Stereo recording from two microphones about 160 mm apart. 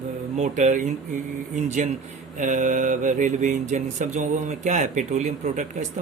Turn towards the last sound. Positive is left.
turn(degrees=-50)  # may be behind; listen again after turning